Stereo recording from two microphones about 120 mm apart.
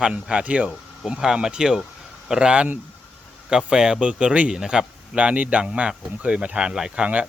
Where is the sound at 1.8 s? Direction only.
5° right (ahead or behind).